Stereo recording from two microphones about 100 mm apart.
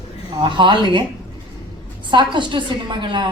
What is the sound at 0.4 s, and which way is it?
Speech, 55° right (ahead or behind).